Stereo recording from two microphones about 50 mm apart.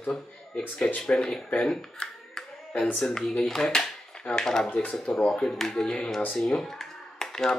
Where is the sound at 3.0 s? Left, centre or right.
Centre.